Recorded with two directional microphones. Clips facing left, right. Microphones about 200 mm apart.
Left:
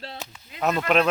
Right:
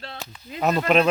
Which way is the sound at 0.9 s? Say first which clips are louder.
Right 2 dB; centre (ahead or behind).